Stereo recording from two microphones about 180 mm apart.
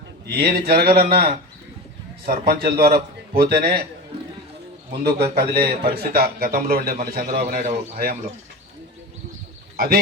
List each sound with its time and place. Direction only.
0.3 s a man's voice: 60° right (ahead or behind)
4.9 s a man's voice: 60° right (ahead or behind)
9.7 s speech: 60° right (ahead or behind)